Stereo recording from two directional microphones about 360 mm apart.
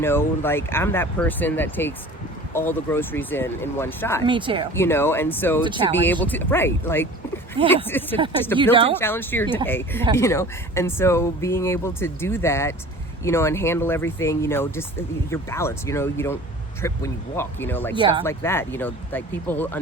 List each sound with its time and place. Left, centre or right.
0.0 s speech: centre
4.3 s speech: centre
4.7 s speech: centre
5.6 s speech: centre
6.0 s speech: centre
7.6 s speech: centre
9.0 s speech: centre